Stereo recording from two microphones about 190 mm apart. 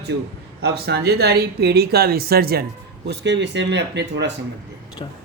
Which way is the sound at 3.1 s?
65° right (ahead or behind).